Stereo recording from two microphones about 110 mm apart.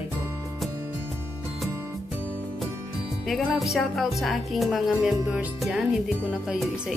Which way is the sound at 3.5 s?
5° right (ahead or behind).